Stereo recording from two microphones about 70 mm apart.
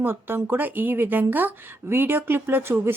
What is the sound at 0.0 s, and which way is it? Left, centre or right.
Speech, right.